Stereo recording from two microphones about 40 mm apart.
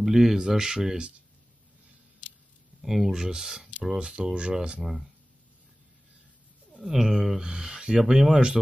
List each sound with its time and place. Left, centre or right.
0.0 s speech: centre
2.8 s speech: centre
3.1 s speech: centre
4.8 s speech: centre
6.8 s speech: centre